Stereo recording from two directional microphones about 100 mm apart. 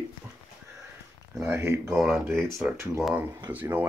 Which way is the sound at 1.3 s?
25° right (ahead or behind).